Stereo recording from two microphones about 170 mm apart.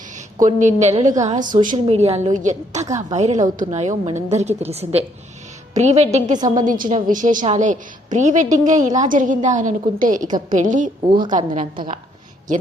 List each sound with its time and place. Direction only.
0.1 s a woman's voice: 45° right (ahead or behind)